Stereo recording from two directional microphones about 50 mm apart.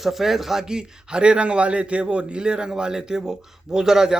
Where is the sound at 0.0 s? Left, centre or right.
Centre.